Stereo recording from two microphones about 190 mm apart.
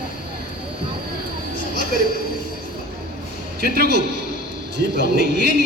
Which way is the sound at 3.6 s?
55° right (ahead or behind).